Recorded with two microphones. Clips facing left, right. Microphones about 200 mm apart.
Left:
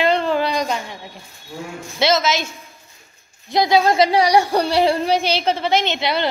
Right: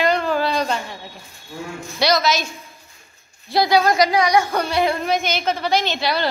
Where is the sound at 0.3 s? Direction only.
15° left (ahead or behind).